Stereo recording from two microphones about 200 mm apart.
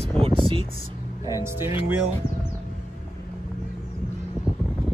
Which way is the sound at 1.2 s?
15° right (ahead or behind).